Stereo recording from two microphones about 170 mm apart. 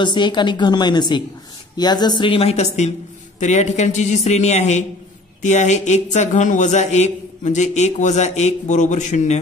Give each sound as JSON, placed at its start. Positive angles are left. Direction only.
{"t": 0.0, "sound": "a woman's voice", "side_deg": 25}